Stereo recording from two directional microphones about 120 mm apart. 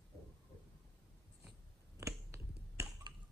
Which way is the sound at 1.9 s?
25° right (ahead or behind).